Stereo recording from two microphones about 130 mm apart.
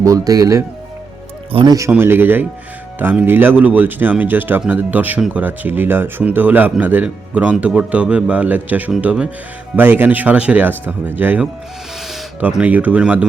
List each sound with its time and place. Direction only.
0.0 s speech: 25° right (ahead or behind)
1.9 s speech: 15° right (ahead or behind)